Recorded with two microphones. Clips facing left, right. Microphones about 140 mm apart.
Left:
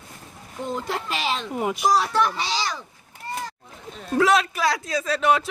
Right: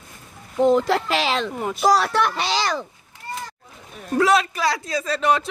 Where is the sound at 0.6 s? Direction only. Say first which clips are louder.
Right 11 dB; 90° right.